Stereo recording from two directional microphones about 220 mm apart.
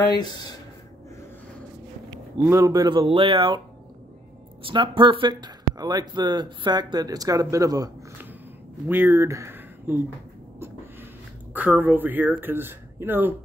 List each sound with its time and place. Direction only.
0.0 s speech: 20° left (ahead or behind)
2.4 s speech: 15° right (ahead or behind)
4.6 s speech: 20° right (ahead or behind)
11.5 s speech: 10° right (ahead or behind)